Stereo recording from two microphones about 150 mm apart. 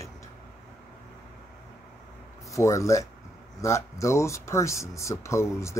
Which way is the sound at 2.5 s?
20° left (ahead or behind).